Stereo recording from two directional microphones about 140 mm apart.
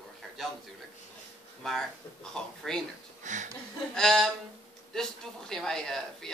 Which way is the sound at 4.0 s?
5° left (ahead or behind).